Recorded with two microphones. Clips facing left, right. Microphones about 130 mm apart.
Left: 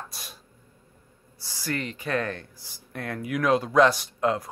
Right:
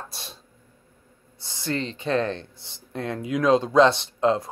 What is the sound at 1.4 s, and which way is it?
Speech, 25° right (ahead or behind).